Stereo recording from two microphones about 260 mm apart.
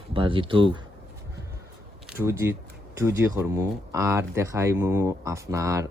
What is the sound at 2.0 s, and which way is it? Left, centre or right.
Speech, centre.